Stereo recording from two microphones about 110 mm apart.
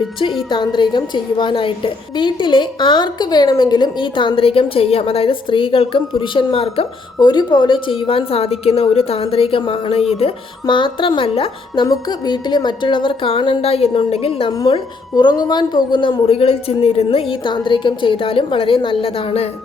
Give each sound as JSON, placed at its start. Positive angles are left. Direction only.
{"t": 0.5, "sound": "a woman's voice", "side_deg": 45}
{"t": 7.2, "sound": "a woman's voice", "side_deg": 40}
{"t": 14.6, "sound": "a woman's voice", "side_deg": 40}